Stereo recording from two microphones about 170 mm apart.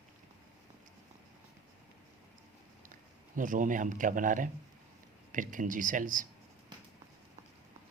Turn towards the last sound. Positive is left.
turn(degrees=-50)  # may be behind; listen again after turning